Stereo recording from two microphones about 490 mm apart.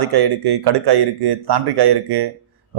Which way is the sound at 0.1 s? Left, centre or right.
Right.